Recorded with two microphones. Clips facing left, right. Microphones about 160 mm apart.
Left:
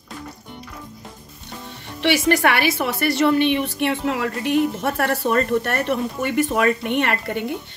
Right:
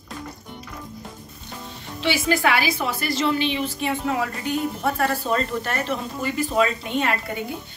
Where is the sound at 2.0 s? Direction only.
70° left (ahead or behind).